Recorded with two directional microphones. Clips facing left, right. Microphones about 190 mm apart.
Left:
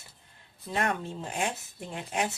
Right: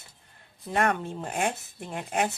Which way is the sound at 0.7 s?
55° right (ahead or behind).